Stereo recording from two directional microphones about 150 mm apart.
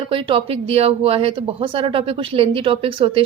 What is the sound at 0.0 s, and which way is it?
Speech, 35° right (ahead or behind).